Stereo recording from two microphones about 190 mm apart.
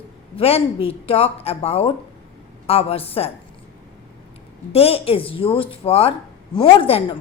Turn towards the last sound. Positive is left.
turn(degrees=30)  # may be behind; listen again after turning